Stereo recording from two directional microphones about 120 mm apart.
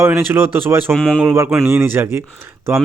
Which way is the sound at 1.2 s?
20° right (ahead or behind).